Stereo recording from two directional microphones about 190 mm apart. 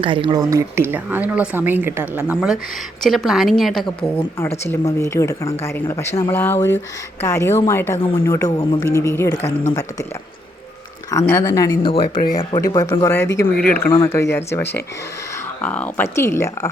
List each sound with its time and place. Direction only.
0.0 s a woman's voice: 25° right (ahead or behind); by 3.8 s centre (ahead or behind)
4.6 s speech: 15° left (ahead or behind)
11.1 s speech: 15° left (ahead or behind)
11.9 s speech: 30° left (ahead or behind); by 13.2 s 15° left (ahead or behind)
13.2 s speech: 65° left (ahead or behind)
13.7 s speech: 15° left (ahead or behind)